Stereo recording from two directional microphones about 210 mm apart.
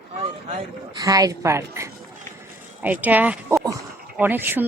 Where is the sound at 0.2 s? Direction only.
30° right (ahead or behind).